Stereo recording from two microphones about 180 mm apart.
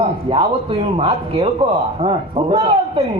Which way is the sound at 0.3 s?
30° right (ahead or behind).